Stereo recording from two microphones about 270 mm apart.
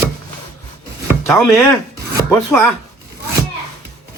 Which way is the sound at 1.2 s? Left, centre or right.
Centre.